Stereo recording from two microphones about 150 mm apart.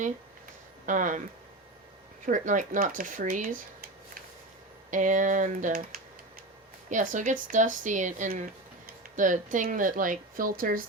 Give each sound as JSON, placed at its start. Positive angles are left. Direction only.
{"t": 0.9, "sound": "speech", "side_deg": -60}
{"t": 2.2, "sound": "speech", "side_deg": -60}
{"t": 4.9, "sound": "speech", "side_deg": -55}